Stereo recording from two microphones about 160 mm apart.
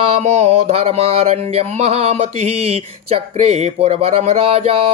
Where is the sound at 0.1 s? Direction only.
40° right (ahead or behind).